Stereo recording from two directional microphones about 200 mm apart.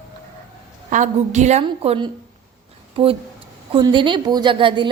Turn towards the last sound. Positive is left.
turn(degrees=-25)  # may be behind; listen again after turning